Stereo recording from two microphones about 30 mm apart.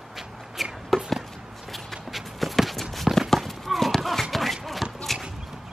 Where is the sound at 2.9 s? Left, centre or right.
Centre.